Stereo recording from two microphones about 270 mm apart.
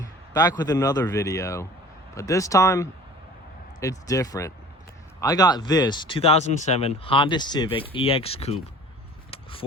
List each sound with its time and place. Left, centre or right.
0.0 s a man's voice: centre
9.3 s vehicle: centre